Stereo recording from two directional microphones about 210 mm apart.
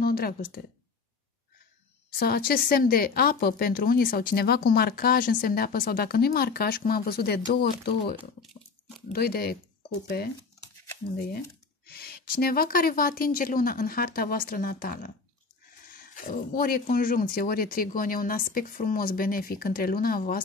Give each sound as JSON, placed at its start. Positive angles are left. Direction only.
{"t": 0.0, "sound": "speech", "side_deg": 45}
{"t": 2.1, "sound": "a woman's voice", "side_deg": 45}
{"t": 11.8, "sound": "a woman's voice", "side_deg": 50}